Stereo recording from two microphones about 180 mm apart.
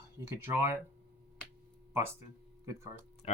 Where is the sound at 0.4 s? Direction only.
15° right (ahead or behind).